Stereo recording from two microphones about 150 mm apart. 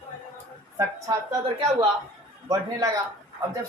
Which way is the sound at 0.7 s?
20° right (ahead or behind).